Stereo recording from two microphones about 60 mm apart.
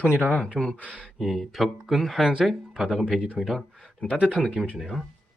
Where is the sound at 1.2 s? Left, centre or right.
Centre.